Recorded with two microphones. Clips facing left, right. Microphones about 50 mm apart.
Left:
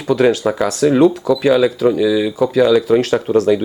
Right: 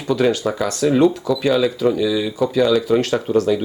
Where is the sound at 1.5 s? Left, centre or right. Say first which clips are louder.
Left 4 dB; centre.